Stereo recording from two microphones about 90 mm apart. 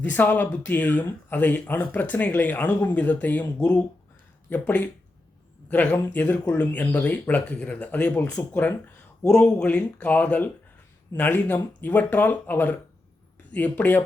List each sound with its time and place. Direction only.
0.0 s speech: 20° left (ahead or behind)
4.4 s speech: 15° left (ahead or behind)